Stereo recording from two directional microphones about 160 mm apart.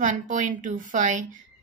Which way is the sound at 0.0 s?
50° right (ahead or behind).